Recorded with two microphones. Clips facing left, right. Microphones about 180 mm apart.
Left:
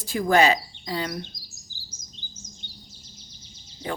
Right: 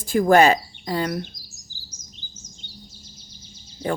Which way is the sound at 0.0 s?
50° right (ahead or behind).